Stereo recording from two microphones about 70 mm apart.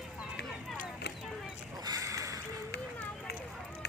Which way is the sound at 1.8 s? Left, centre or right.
Right.